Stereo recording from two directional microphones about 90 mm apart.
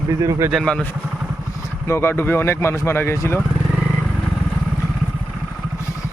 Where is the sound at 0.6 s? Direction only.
10° left (ahead or behind).